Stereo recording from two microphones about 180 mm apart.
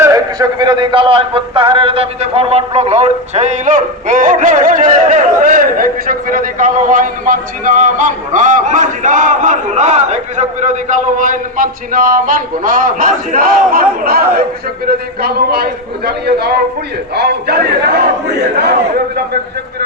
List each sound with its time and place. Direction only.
0.0 s a man's voice: 20° right (ahead or behind); by 18.0 s 65° right (ahead or behind)